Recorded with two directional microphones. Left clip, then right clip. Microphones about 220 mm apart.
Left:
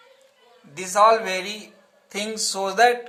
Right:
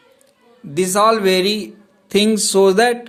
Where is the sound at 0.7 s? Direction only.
45° right (ahead or behind).